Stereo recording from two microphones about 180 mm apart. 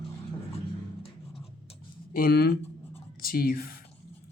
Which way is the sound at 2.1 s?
60° left (ahead or behind).